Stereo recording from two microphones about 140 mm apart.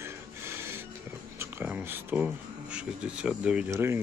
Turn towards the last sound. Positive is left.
turn(degrees=-15)  # may be behind; listen again after turning